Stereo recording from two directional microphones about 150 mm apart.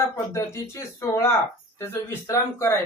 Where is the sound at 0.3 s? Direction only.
20° left (ahead or behind).